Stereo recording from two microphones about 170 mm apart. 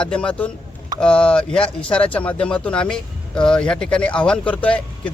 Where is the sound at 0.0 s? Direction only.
5° left (ahead or behind).